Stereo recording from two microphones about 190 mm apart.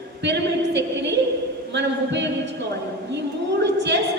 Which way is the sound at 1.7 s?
70° right (ahead or behind).